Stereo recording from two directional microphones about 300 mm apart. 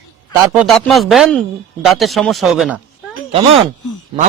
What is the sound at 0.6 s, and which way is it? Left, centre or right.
Speech, centre.